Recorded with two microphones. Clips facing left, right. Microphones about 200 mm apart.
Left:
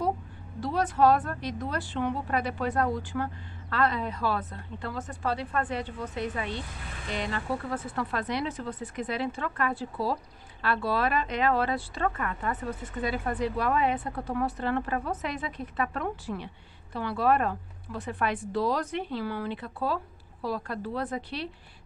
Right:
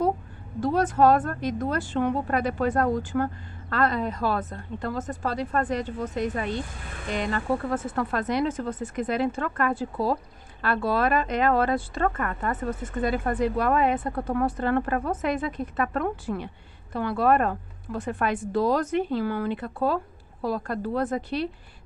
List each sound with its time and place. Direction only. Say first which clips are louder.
0.6 s speech: right 4 dB; 50° right (ahead or behind)